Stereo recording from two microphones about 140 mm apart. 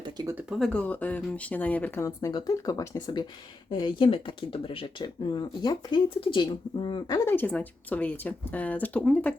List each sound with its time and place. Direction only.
0.0 s a sound: 30° right (ahead or behind)
0.6 s speech: 10° left (ahead or behind)
2.0 s speech: 25° left (ahead or behind)
7.3 s speech: 10° left (ahead or behind)